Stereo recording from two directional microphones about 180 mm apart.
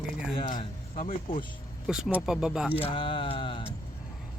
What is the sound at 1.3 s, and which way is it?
Speech, 50° left (ahead or behind).